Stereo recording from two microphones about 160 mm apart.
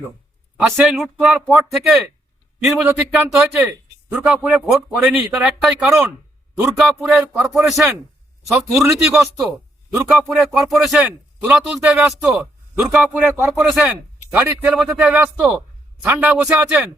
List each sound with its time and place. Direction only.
0.8 s a man's voice: 5° right (ahead or behind)